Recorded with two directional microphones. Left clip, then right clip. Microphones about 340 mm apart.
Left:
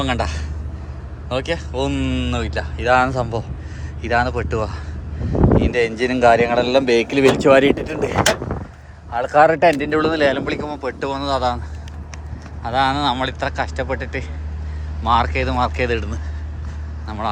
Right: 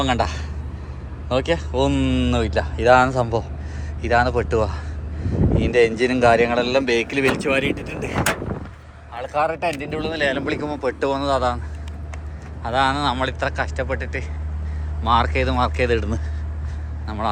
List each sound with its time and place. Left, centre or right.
0.0 s speech: centre
9.1 s speech: left
12.6 s speech: centre